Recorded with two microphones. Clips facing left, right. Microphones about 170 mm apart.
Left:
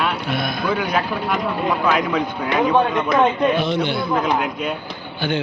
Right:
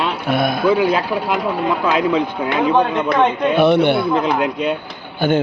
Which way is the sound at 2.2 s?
25° right (ahead or behind).